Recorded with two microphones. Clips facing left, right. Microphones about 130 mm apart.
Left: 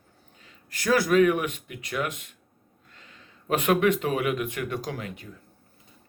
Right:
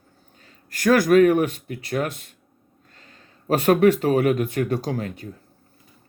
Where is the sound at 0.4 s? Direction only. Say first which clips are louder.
Right 7 dB; 50° right (ahead or behind).